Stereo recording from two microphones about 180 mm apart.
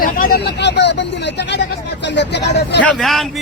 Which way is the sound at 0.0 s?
55° left (ahead or behind).